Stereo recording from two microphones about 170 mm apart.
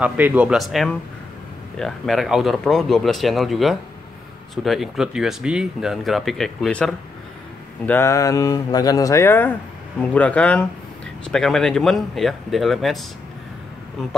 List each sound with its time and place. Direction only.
0.0 s speech: 10° right (ahead or behind)